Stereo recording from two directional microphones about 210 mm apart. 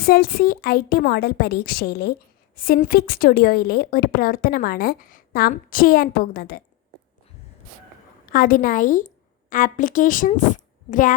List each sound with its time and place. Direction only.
0.0 s speech: 45° left (ahead or behind)
8.3 s a woman's voice: 40° left (ahead or behind)